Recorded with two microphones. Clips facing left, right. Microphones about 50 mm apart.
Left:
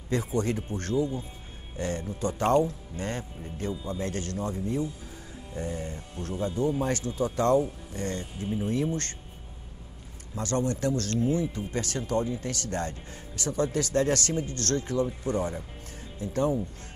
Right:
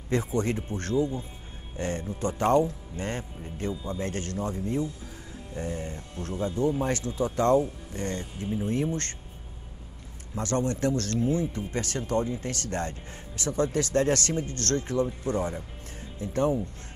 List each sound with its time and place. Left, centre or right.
0.1 s speech: right
10.3 s speech: right